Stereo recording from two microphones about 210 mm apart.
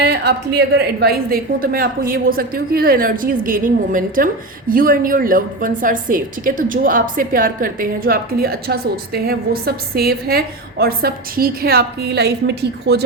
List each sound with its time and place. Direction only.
0.0 s a woman's voice: 50° right (ahead or behind)